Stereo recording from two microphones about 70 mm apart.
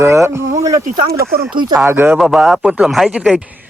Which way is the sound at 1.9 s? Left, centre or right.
Right.